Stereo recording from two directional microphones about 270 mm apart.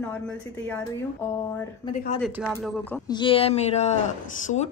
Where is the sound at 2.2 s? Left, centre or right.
Centre.